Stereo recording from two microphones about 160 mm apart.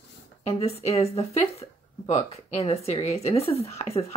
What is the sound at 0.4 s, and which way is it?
A woman's voice, 40° left (ahead or behind).